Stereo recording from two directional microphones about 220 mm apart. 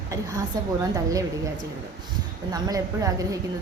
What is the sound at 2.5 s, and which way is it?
Speech, 15° right (ahead or behind).